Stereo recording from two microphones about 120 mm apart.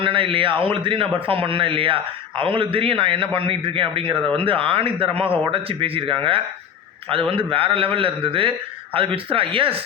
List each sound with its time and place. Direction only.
0.0 s a man's voice: 45° right (ahead or behind)